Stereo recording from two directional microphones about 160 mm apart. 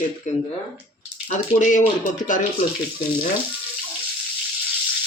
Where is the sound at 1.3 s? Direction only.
50° left (ahead or behind).